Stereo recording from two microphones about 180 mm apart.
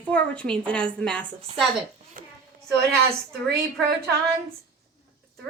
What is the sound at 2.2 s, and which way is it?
Child singing, 50° right (ahead or behind).